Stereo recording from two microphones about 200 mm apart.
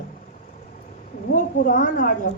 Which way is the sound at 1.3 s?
40° left (ahead or behind).